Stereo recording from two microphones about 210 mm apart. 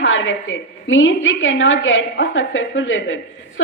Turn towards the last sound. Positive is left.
turn(degrees=65)  # may be behind; listen again after turning